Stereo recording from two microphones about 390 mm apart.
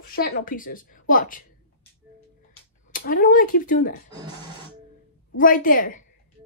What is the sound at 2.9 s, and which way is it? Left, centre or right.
Speech, left.